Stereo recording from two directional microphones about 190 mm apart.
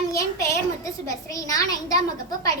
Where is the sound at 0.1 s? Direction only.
15° left (ahead or behind).